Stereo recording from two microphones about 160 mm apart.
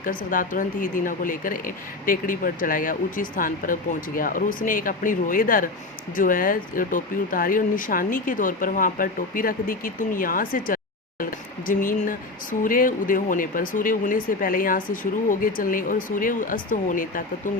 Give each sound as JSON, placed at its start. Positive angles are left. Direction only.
{"t": 0.3, "sound": "speech", "side_deg": 55}